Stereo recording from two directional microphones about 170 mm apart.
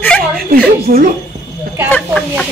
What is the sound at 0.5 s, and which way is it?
Speech, 60° right (ahead or behind).